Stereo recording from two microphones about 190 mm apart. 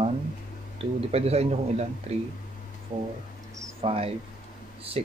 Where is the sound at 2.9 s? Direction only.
25° right (ahead or behind).